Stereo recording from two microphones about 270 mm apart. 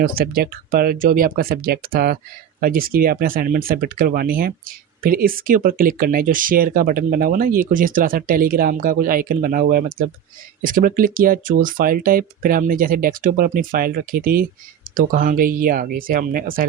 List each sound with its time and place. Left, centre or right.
0.0 s speech: right